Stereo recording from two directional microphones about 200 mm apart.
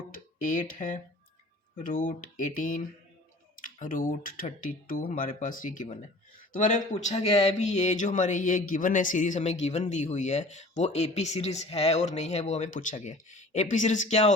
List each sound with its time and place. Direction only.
0.1 s speech: 40° left (ahead or behind)